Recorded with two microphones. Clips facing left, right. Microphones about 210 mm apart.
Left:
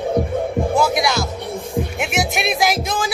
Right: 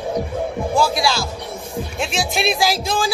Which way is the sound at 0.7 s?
20° left (ahead or behind).